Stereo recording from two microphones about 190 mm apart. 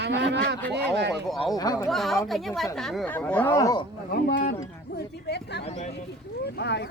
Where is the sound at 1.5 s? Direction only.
20° left (ahead or behind).